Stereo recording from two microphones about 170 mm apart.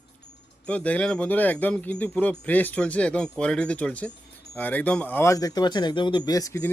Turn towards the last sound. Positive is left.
turn(degrees=15)  # may be behind; listen again after turning